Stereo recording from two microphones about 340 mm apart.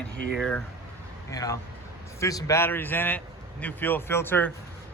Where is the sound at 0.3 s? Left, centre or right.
Centre.